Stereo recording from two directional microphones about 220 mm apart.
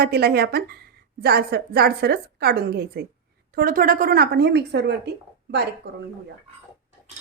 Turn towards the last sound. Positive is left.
turn(degrees=-50)  # may be behind; listen again after turning